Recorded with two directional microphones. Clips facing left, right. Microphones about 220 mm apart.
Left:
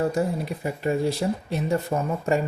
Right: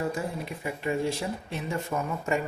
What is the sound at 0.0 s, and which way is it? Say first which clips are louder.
Speech: left 7 dB; 40° left (ahead or behind).